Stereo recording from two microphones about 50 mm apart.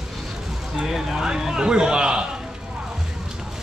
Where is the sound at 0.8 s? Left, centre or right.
Centre.